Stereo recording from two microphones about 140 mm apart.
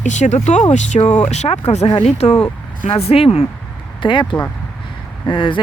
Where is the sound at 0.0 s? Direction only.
55° left (ahead or behind).